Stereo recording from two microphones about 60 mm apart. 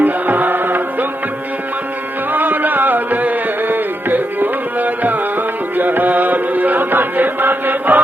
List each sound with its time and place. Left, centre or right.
0.0 s music: right
2.3 s music: right